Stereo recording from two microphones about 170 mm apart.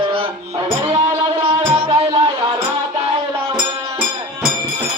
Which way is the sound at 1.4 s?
30° right (ahead or behind).